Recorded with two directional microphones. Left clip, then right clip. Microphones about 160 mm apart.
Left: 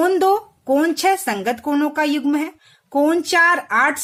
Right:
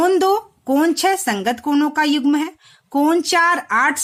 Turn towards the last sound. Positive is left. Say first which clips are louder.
# even
turn(degrees=-35)  # may be behind; listen again after turning